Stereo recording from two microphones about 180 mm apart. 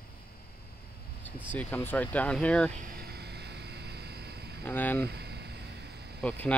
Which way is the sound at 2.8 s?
55° right (ahead or behind).